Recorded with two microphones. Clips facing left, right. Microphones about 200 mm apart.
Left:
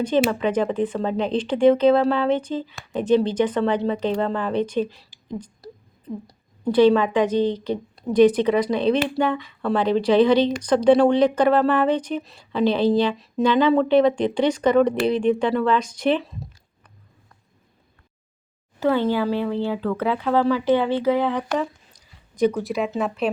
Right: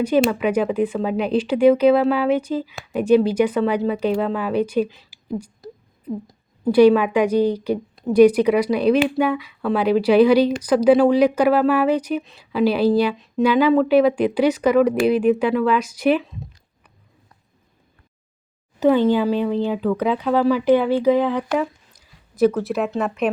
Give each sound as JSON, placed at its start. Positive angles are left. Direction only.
{"t": 0.3, "sound": "a woman's voice", "side_deg": -10}
{"t": 18.8, "sound": "a woman's voice", "side_deg": -15}